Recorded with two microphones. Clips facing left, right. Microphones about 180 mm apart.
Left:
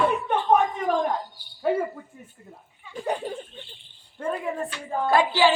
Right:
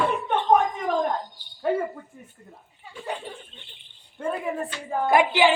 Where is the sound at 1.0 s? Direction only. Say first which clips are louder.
Even; 5° left (ahead or behind).